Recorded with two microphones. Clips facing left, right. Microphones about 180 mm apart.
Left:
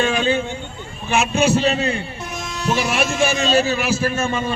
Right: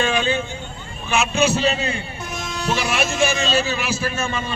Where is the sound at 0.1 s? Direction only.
40° left (ahead or behind).